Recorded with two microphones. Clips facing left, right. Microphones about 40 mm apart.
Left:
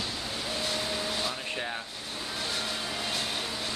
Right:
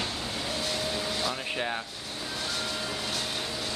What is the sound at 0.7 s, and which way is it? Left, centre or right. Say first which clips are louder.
Vehicle: even; centre.